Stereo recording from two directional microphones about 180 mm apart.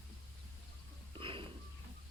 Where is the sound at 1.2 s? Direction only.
30° right (ahead or behind).